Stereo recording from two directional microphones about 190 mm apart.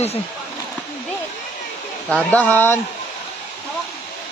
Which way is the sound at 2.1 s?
5° left (ahead or behind).